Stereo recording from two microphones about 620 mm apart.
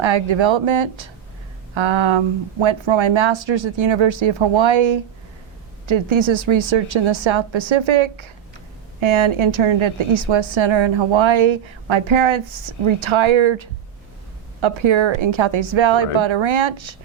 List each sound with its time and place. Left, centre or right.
0.0 s a woman's voice: right